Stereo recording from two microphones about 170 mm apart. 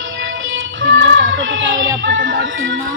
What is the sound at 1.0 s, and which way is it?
Speech, 90° right.